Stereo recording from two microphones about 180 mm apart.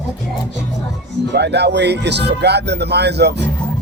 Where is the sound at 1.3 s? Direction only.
70° right (ahead or behind).